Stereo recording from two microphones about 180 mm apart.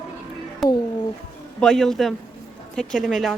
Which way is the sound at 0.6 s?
Centre (ahead or behind).